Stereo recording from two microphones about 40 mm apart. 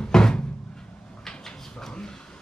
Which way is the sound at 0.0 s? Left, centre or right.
Centre.